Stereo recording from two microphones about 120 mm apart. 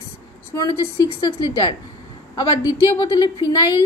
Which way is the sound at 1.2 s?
35° left (ahead or behind).